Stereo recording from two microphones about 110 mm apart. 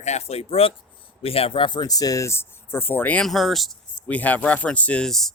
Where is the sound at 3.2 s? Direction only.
Centre (ahead or behind).